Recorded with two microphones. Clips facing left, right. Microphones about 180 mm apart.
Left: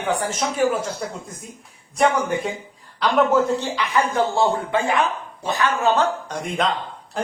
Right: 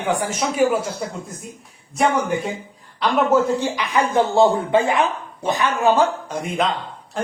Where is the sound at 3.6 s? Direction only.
15° right (ahead or behind).